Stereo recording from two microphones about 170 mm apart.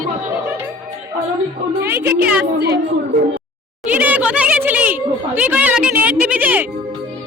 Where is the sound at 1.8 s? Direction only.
10° right (ahead or behind).